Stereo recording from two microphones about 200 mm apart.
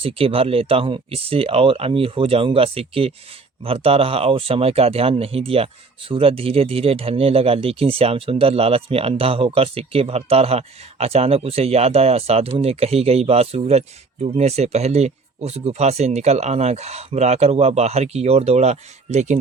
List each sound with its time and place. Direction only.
0.0 s speech: 30° right (ahead or behind)